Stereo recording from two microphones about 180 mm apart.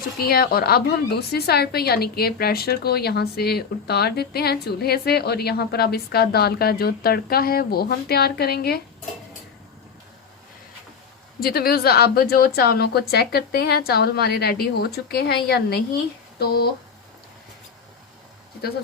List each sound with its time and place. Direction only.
0.2 s a woman's voice: 60° left (ahead or behind)
11.3 s a woman's voice: 55° left (ahead or behind)